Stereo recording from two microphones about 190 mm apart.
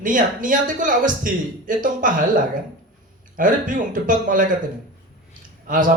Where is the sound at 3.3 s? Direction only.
45° right (ahead or behind).